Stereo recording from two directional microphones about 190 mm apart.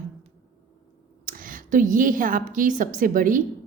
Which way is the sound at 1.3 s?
45° right (ahead or behind).